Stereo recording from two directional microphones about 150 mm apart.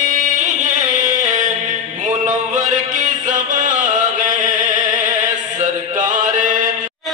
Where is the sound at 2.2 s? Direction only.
60° right (ahead or behind).